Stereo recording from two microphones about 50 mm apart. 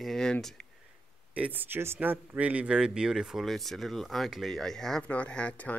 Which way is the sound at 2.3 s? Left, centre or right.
Right.